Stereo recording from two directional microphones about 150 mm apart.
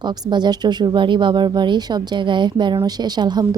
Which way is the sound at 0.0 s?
30° right (ahead or behind).